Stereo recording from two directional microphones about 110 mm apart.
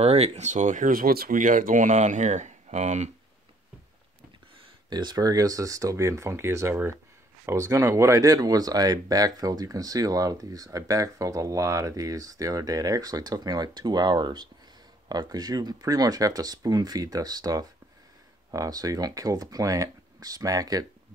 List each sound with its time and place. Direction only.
0.0 s speech: 70° right (ahead or behind); by 0.7 s 90° right
2.0 s speech: 90° right
4.8 s speech: 40° right (ahead or behind)